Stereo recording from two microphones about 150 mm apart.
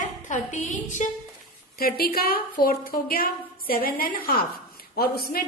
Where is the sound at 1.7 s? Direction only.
90° left.